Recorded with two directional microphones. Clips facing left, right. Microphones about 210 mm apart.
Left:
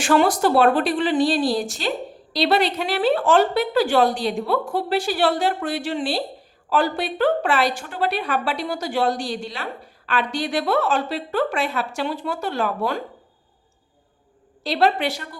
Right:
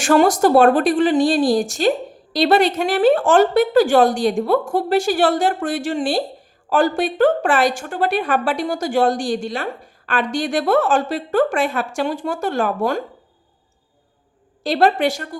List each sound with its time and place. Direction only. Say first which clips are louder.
0.0 s a woman's voice: right 4 dB; 45° right (ahead or behind)
14.6 s a woman's voice: right 4 dB; 50° right (ahead or behind)